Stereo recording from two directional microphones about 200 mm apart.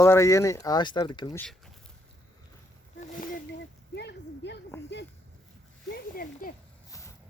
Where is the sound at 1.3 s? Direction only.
5° left (ahead or behind).